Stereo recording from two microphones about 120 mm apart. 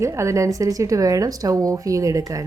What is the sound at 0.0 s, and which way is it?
Speech, 25° right (ahead or behind).